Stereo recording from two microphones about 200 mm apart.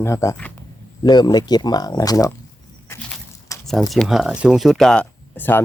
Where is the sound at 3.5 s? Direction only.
15° left (ahead or behind).